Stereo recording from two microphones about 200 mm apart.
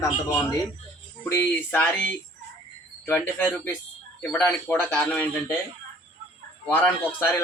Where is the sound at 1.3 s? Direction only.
10° left (ahead or behind).